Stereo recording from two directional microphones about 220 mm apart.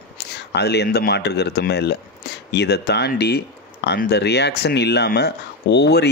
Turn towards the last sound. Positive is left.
turn(degrees=50)  # may be behind; listen again after turning